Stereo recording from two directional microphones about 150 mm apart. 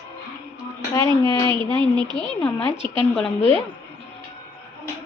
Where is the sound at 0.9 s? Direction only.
20° left (ahead or behind).